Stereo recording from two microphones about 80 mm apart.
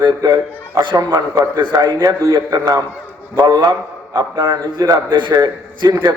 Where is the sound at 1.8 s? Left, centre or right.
Right.